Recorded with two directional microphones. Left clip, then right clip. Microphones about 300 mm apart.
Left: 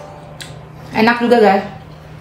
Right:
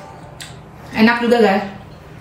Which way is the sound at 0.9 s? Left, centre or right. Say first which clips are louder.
Left 2 dB; centre.